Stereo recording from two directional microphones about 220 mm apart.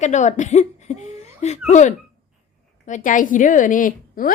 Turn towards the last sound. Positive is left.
turn(degrees=40)  # may be behind; listen again after turning